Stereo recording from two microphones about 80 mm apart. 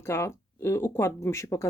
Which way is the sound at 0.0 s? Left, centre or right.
Left.